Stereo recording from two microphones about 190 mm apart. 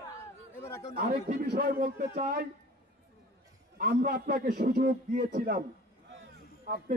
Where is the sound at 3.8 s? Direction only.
50° right (ahead or behind).